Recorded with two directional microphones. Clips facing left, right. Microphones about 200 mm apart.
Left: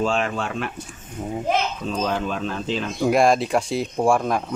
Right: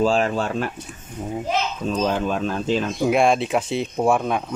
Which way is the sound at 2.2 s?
45° right (ahead or behind).